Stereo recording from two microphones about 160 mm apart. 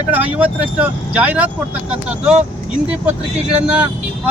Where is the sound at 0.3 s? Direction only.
10° right (ahead or behind).